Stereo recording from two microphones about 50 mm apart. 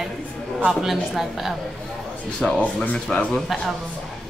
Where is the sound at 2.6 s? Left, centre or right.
Left.